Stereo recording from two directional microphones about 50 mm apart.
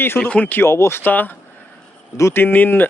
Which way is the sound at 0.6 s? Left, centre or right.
Left.